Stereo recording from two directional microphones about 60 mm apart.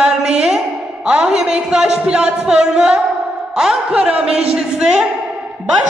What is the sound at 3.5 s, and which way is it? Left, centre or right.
Speech, centre.